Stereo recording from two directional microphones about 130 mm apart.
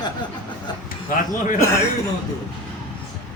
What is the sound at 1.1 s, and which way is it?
Speech, 80° left.